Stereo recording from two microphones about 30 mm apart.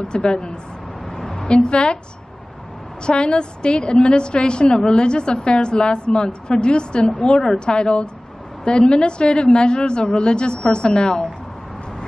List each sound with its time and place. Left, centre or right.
0.1 s a woman's voice: left
1.1 s a sound: centre
1.7 s a woman's voice: left
3.1 s a woman's voice: left